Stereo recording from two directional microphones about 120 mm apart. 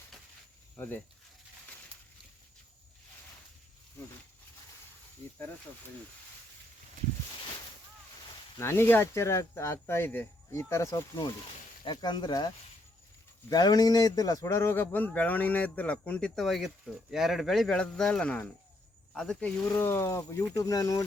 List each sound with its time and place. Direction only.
8.5 s speech: 20° left (ahead or behind)
11.9 s speech: 40° left (ahead or behind)
13.5 s a man's voice: 35° left (ahead or behind); by 19.5 s 5° left (ahead or behind)
19.7 s speech: 20° left (ahead or behind)